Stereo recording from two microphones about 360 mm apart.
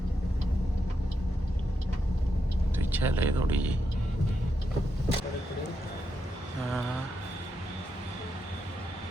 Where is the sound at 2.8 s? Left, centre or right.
Centre.